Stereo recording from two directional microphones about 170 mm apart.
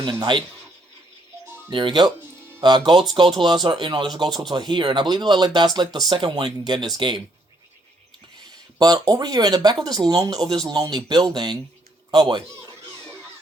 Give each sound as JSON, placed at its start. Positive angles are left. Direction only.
{"t": 0.0, "sound": "speech", "side_deg": -30}
{"t": 1.7, "sound": "speech", "side_deg": -25}
{"t": 8.8, "sound": "speech", "side_deg": -20}
{"t": 12.1, "sound": "a sound", "side_deg": -25}